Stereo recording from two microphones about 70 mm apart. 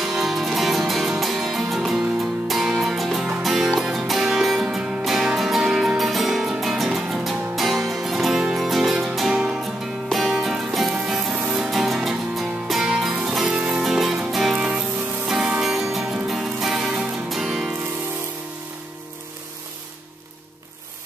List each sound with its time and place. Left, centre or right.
0.0 s music: centre